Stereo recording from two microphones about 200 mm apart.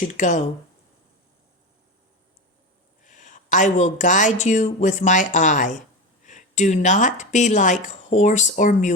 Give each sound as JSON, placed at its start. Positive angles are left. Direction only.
{"t": 0.1, "sound": "speech", "side_deg": 35}
{"t": 3.0, "sound": "a woman's voice", "side_deg": 40}